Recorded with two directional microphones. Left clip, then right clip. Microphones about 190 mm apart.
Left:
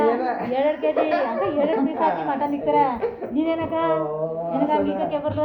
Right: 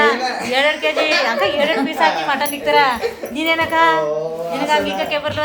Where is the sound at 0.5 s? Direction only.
10° right (ahead or behind).